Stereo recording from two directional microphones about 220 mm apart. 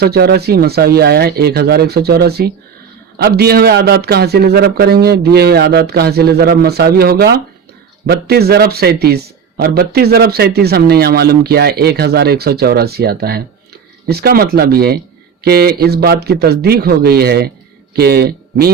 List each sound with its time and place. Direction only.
0.0 s a man's voice: 45° right (ahead or behind)